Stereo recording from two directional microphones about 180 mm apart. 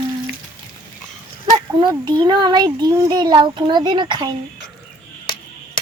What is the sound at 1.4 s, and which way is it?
A child's voice, 25° right (ahead or behind).